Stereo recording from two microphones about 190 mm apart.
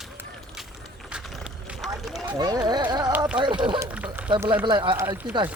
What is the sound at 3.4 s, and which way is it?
Speech, 25° right (ahead or behind).